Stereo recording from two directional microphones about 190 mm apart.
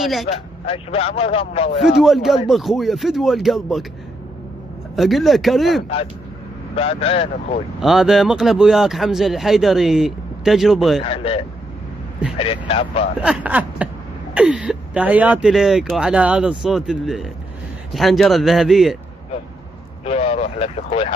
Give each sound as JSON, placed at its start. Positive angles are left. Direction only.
{"t": 0.0, "sound": "speech", "side_deg": 0}
{"t": 0.3, "sound": "a man's voice", "side_deg": 30}
{"t": 1.8, "sound": "speech", "side_deg": 0}
{"t": 4.9, "sound": "speech", "side_deg": 0}
{"t": 6.7, "sound": "a man's voice", "side_deg": 30}
{"t": 7.8, "sound": "speech", "side_deg": 0}
{"t": 11.0, "sound": "a man's voice", "side_deg": 30}
{"t": 13.2, "sound": "a sound", "side_deg": -5}
{"t": 14.3, "sound": "speech", "side_deg": -5}
{"t": 20.1, "sound": "speech", "side_deg": 30}